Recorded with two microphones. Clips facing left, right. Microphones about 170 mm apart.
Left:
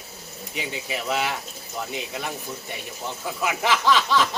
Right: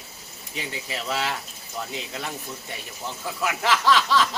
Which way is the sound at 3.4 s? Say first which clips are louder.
Even; 15° left (ahead or behind).